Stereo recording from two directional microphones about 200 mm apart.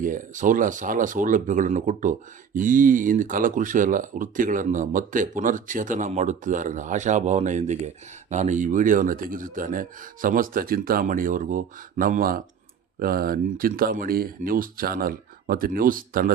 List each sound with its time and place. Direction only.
0.0 s a man's voice: 40° right (ahead or behind)